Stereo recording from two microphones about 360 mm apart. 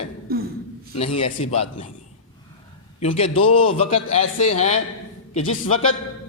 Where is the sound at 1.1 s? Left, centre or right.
Centre.